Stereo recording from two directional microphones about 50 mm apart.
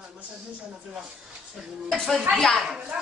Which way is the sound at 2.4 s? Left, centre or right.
Centre.